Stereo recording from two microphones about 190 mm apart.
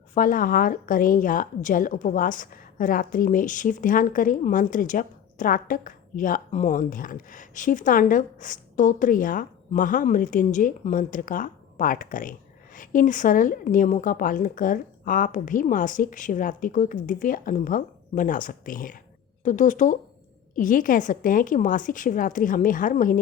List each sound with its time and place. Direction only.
0.1 s a woman's voice: 45° left (ahead or behind)